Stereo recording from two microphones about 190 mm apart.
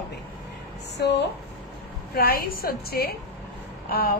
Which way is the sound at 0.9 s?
65° left (ahead or behind).